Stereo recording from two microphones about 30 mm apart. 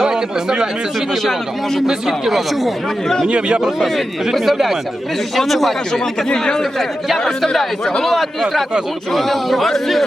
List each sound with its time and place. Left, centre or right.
0.0 s speech: centre
2.0 s speech: centre
3.2 s speech: right
4.4 s speech: centre
5.4 s speech: centre
5.9 s speech: left
7.3 s a man's voice: centre